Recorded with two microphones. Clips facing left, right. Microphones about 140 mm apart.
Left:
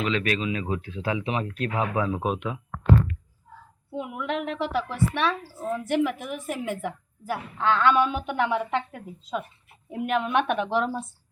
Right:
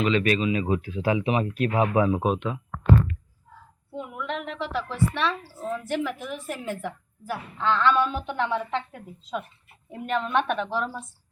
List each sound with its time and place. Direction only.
0.0 s speech: centre (ahead or behind)
2.2 s speech: 5° left (ahead or behind)
3.9 s a woman's voice: 10° left (ahead or behind)
10.7 s speech: 25° left (ahead or behind)